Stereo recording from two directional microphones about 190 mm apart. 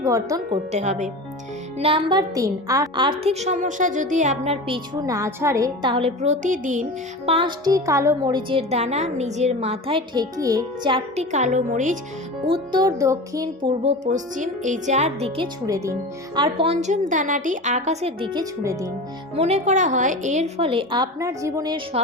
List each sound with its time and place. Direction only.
0.0 s speech: 15° right (ahead or behind)
0.5 s a woman's voice: 35° right (ahead or behind)
1.8 s a woman's voice: 25° right (ahead or behind)
4.7 s a woman's voice: 20° right (ahead or behind); by 6.8 s 40° right (ahead or behind)
7.3 s a woman's voice: 25° right (ahead or behind)
12.5 s a woman's voice: 25° right (ahead or behind)
14.0 s a woman's voice: 40° right (ahead or behind)
15.6 s a woman's voice: 15° right (ahead or behind)
18.6 s speech: 15° right (ahead or behind)
19.4 s a woman's voice: 35° right (ahead or behind); by 21.8 s 20° right (ahead or behind)